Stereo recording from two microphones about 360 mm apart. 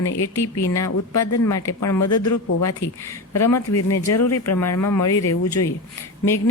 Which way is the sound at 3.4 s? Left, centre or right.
Centre.